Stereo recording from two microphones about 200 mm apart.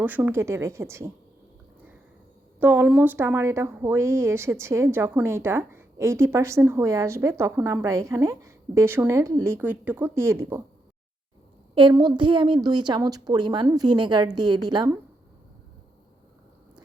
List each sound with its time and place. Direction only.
0.0 s speech: 10° right (ahead or behind)
2.6 s speech: 10° right (ahead or behind)
11.7 s a woman's voice: 25° right (ahead or behind)